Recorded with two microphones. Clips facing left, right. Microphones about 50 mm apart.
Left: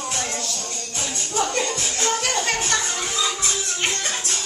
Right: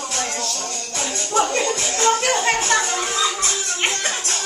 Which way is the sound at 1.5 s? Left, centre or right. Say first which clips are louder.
Right 3 dB; right.